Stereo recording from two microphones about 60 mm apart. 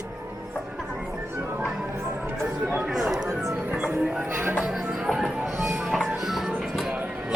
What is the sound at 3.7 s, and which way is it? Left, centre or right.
Music, centre.